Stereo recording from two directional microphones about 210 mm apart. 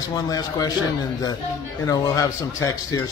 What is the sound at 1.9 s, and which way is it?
A man's voice, 15° left (ahead or behind).